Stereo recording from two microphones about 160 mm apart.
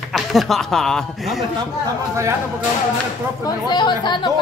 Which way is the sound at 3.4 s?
25° left (ahead or behind).